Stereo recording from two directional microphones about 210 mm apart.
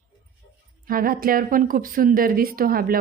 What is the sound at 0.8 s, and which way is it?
A woman's voice, 45° right (ahead or behind).